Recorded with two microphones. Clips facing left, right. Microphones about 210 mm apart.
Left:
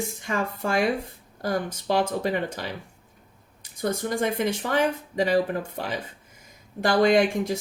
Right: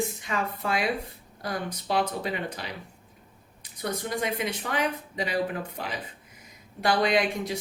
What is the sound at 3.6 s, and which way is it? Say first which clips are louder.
Speech: left 5 dB; 45° left (ahead or behind).